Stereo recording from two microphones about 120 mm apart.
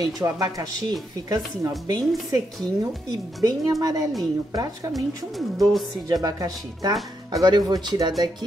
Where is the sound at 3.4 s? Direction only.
30° right (ahead or behind).